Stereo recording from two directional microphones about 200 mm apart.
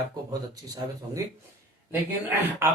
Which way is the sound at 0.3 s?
15° right (ahead or behind).